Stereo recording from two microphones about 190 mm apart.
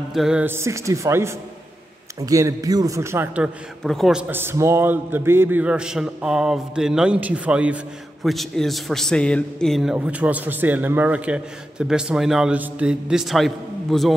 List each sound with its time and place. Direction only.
0.1 s a man's voice: 5° right (ahead or behind)
3.8 s a man's voice: centre (ahead or behind)